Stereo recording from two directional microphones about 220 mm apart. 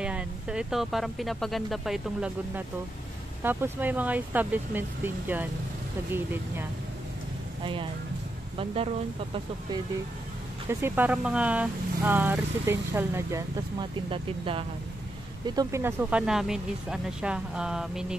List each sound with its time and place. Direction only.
0.0 s speech: 5° right (ahead or behind)
7.6 s speech: 25° right (ahead or behind)
10.7 s speech: 10° right (ahead or behind)